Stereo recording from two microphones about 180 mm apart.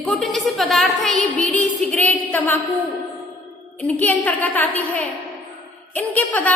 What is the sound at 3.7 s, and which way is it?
A woman's voice, 10° left (ahead or behind).